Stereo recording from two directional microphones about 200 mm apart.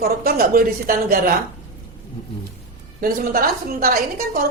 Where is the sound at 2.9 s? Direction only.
45° right (ahead or behind).